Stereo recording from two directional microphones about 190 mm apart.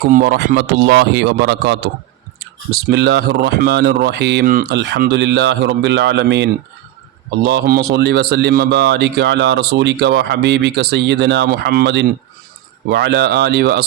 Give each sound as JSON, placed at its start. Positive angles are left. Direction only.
{"t": 0.1, "sound": "speech", "side_deg": -55}
{"t": 4.4, "sound": "speech", "side_deg": -45}
{"t": 4.7, "sound": "speech", "side_deg": -60}